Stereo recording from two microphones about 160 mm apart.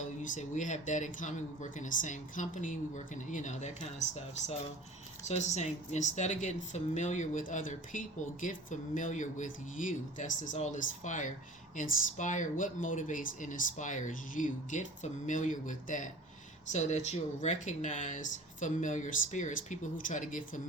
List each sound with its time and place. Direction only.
0.2 s speech: 50° left (ahead or behind)